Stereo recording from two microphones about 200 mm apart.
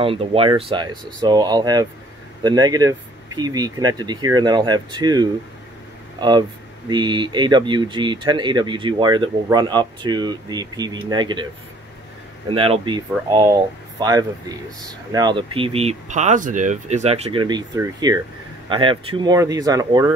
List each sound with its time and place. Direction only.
0.0 s speech: 30° right (ahead or behind)
12.4 s speech: 30° right (ahead or behind)